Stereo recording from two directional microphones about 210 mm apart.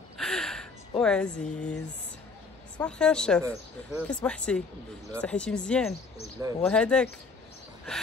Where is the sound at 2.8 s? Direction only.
5° left (ahead or behind).